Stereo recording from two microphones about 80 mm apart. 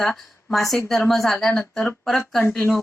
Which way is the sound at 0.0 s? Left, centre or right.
Centre.